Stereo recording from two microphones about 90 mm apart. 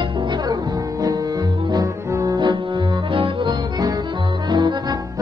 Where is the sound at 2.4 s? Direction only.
60° right (ahead or behind).